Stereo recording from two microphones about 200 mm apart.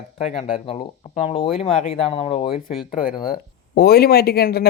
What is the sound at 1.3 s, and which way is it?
Speech, 30° left (ahead or behind).